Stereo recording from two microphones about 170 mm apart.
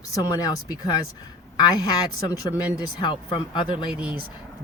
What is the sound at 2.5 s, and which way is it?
Speech, 5° right (ahead or behind).